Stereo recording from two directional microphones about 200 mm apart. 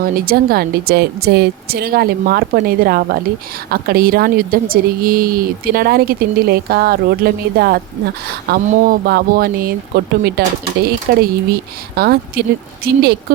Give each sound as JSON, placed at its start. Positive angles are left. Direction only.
{"t": 0.0, "sound": "a woman's voice", "side_deg": -50}
{"t": 8.6, "sound": "speech", "side_deg": -35}
{"t": 9.0, "sound": "a woman's voice", "side_deg": -50}